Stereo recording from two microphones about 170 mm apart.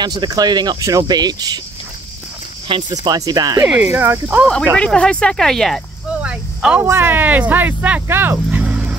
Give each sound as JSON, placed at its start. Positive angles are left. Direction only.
{"t": 0.0, "sound": "speech", "side_deg": -25}
{"t": 2.7, "sound": "speech", "side_deg": -20}
{"t": 3.6, "sound": "speech", "side_deg": -5}
{"t": 4.7, "sound": "speech", "side_deg": 5}